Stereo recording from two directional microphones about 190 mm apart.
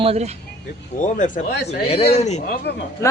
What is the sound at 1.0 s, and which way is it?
A man's voice, 40° left (ahead or behind).